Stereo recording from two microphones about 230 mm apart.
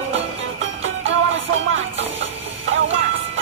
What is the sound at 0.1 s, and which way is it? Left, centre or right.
Music, right.